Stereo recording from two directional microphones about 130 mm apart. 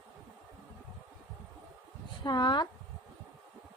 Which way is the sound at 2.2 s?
35° left (ahead or behind).